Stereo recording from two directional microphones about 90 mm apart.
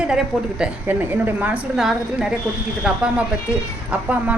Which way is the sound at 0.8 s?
20° right (ahead or behind).